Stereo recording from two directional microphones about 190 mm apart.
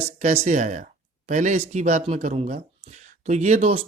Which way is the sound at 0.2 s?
40° right (ahead or behind).